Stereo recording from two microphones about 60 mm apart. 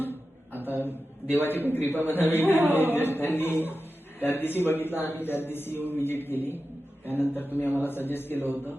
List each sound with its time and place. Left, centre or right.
0.6 s a man's voice: left